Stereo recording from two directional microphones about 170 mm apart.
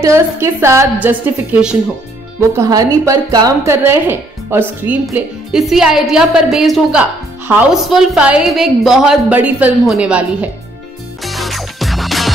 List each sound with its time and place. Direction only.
0.0 s a woman's voice: 15° right (ahead or behind)
2.5 s a woman's voice: 20° right (ahead or behind)
5.1 s a woman's voice: centre (ahead or behind)
11.2 s music: centre (ahead or behind)